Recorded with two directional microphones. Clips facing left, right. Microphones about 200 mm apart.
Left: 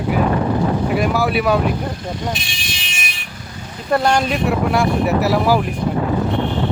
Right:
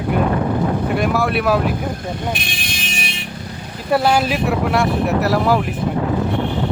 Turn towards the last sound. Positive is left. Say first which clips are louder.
# left 1 dB
turn(degrees=0)  # may be behind; listen again after turning